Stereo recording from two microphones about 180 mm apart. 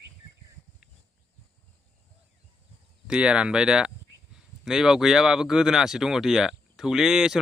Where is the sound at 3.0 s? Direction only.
5° right (ahead or behind).